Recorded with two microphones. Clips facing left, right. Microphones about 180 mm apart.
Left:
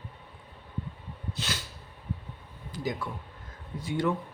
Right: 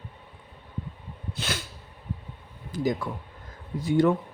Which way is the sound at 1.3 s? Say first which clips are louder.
Right 4 dB; 55° right (ahead or behind).